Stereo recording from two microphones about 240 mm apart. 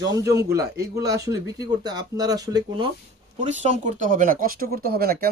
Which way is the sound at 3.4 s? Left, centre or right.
Right.